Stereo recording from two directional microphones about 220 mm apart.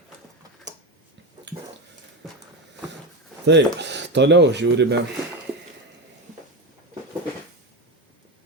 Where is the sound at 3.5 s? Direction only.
50° right (ahead or behind).